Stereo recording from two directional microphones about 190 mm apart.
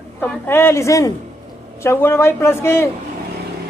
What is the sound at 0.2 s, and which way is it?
A woman's voice, 10° left (ahead or behind).